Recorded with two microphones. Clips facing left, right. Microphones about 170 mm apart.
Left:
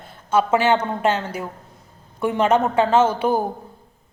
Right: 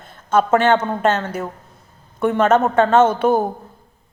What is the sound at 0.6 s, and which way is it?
Speech, 10° left (ahead or behind).